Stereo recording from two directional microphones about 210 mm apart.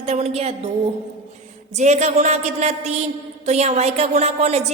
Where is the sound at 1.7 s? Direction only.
35° right (ahead or behind).